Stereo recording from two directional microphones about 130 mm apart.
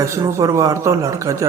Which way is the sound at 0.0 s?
25° right (ahead or behind).